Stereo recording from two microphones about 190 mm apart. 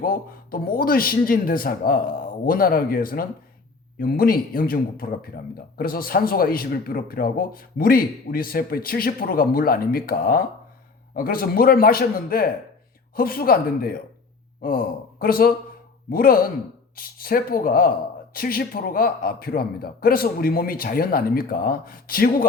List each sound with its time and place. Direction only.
0.0 s a man's voice: 50° left (ahead or behind)